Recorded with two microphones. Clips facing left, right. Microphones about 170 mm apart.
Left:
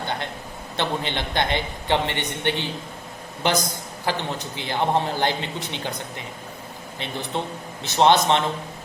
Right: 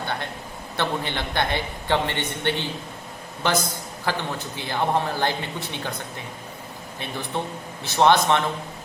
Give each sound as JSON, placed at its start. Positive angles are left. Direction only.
{"t": 0.8, "sound": "a man's voice", "side_deg": 20}
{"t": 4.0, "sound": "a man's voice", "side_deg": 20}
{"t": 7.0, "sound": "a man's voice", "side_deg": 20}